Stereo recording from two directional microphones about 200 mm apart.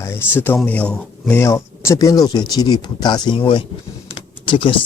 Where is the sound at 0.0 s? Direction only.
10° left (ahead or behind).